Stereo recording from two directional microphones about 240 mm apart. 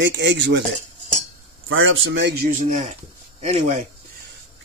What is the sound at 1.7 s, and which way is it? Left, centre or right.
Speech, right.